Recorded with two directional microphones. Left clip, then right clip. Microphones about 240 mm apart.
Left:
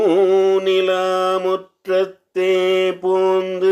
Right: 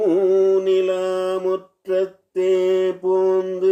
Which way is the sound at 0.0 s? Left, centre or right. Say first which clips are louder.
Left 2 dB; centre.